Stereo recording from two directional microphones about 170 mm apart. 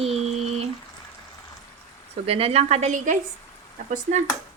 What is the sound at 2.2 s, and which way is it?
Speech, 35° right (ahead or behind).